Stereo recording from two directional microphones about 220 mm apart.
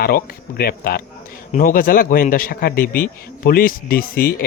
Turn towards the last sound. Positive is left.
turn(degrees=40)  # may be behind; listen again after turning